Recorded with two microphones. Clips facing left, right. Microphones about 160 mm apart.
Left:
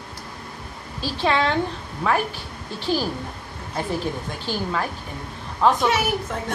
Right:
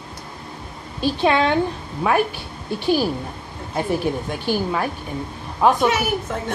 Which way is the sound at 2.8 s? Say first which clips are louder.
Right 4 dB; 15° right (ahead or behind).